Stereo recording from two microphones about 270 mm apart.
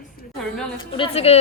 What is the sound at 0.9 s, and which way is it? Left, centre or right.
Speech, left.